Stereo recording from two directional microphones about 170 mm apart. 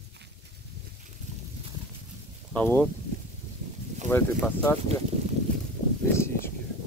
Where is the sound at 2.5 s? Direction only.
10° left (ahead or behind).